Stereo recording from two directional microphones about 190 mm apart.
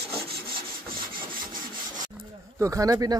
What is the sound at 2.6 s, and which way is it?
Speech, 15° right (ahead or behind).